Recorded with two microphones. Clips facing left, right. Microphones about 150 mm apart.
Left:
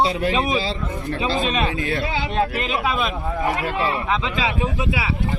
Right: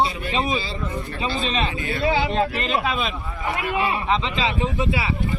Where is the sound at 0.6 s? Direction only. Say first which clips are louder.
Left 3 dB; 90° left.